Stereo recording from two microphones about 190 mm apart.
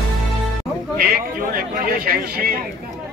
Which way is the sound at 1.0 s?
50° right (ahead or behind).